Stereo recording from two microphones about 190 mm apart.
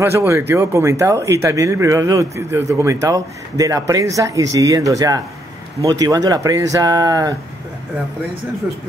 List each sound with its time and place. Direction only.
0.0 s speech: 15° right (ahead or behind)